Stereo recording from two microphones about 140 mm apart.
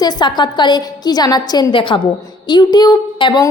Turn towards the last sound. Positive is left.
turn(degrees=30)  # may be behind; listen again after turning